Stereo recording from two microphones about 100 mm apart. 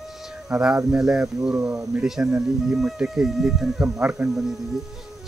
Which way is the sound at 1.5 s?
20° right (ahead or behind).